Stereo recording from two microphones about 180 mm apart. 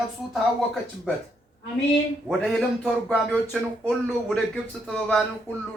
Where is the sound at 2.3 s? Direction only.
Centre (ahead or behind).